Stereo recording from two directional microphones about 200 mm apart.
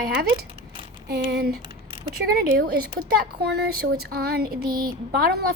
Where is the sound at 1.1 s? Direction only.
55° right (ahead or behind).